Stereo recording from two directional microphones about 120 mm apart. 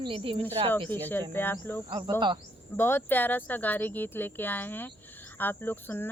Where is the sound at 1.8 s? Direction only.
40° right (ahead or behind).